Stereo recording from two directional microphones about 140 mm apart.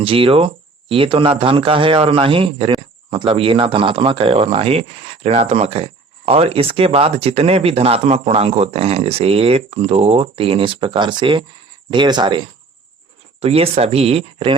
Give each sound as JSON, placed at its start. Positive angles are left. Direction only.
{"t": 0.0, "sound": "speech", "side_deg": -40}
{"t": 13.4, "sound": "speech", "side_deg": -45}